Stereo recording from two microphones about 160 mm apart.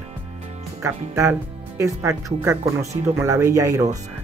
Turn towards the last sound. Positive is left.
turn(degrees=-20)  # may be behind; listen again after turning